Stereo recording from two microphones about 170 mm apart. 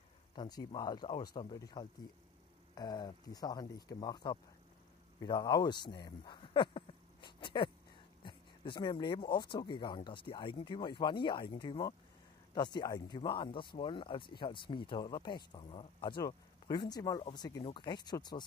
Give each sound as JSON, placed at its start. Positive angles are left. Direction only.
{"t": 0.4, "sound": "speech", "side_deg": 25}
{"t": 6.0, "sound": "a sound", "side_deg": 25}
{"t": 8.2, "sound": "speech", "side_deg": 30}